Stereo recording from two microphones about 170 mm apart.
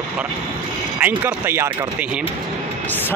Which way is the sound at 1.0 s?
15° right (ahead or behind).